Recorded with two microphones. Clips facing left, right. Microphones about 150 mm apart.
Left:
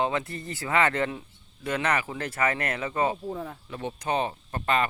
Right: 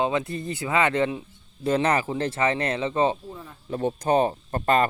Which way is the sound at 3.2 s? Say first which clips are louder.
Left 6 dB; 55° left (ahead or behind).